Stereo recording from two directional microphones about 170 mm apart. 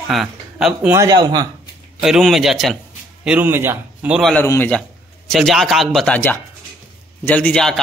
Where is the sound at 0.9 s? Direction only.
20° right (ahead or behind).